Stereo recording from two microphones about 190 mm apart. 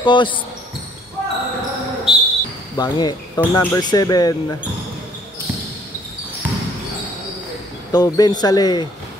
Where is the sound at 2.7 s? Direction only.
20° left (ahead or behind).